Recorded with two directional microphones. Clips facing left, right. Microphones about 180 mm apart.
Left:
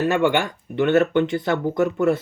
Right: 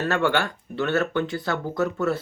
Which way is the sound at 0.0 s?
15° left (ahead or behind).